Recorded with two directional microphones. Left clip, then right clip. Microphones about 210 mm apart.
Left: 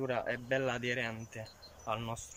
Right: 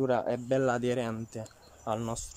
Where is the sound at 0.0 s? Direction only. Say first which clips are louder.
Right 7 dB; 25° right (ahead or behind).